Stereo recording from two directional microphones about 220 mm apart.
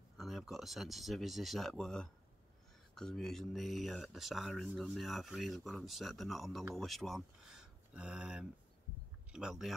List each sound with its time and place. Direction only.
0.2 s speech: centre (ahead or behind)